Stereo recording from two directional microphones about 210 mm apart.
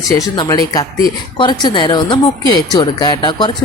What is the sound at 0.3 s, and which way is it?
Speech, 20° left (ahead or behind).